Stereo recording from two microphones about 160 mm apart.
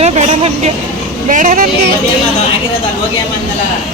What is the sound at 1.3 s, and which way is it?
Speech, 55° right (ahead or behind).